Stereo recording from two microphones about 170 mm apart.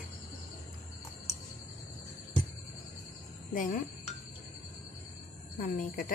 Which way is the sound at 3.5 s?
55° left (ahead or behind).